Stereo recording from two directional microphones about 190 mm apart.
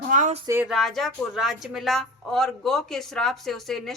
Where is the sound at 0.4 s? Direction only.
10° right (ahead or behind).